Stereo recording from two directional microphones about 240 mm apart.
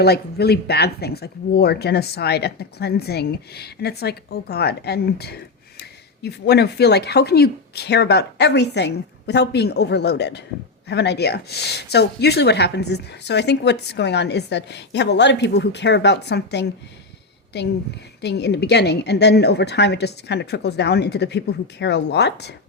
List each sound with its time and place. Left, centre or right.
0.0 s speech: left